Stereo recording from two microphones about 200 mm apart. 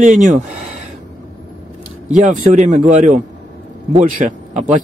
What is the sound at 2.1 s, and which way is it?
Speech, 40° right (ahead or behind).